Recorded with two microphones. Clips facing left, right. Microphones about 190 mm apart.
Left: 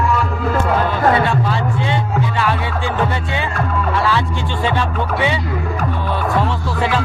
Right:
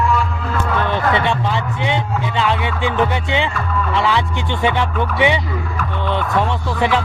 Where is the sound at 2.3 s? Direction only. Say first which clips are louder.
Right 1 dB; 20° right (ahead or behind).